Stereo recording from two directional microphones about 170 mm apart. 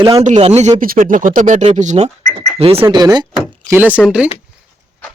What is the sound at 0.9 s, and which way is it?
Speech, 55° right (ahead or behind).